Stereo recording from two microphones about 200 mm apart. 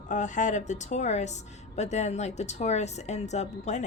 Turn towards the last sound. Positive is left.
turn(degrees=35)  # may be behind; listen again after turning